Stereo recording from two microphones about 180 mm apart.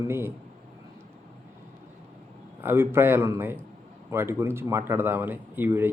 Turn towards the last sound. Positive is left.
turn(degrees=-10)  # may be behind; listen again after turning